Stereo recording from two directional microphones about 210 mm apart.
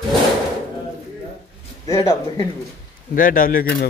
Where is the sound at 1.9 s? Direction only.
15° left (ahead or behind).